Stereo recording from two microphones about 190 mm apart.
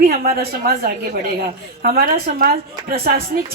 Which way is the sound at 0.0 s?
50° right (ahead or behind).